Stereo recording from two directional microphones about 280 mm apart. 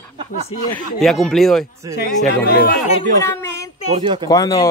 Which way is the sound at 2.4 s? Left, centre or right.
Left.